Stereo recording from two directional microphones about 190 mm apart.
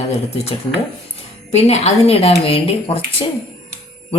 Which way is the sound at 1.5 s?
35° left (ahead or behind).